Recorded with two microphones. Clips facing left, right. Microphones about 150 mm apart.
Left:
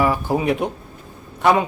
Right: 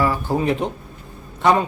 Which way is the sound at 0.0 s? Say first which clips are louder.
Left 1 dB; 15° left (ahead or behind).